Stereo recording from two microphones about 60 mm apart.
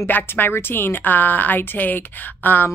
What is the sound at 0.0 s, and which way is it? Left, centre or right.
Speech, left.